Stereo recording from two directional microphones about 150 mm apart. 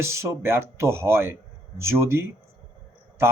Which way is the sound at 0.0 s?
20° right (ahead or behind).